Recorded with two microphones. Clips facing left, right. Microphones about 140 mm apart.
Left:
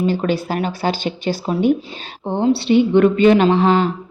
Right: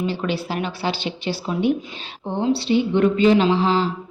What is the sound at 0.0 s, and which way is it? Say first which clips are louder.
Speech: left 5 dB; 45° left (ahead or behind).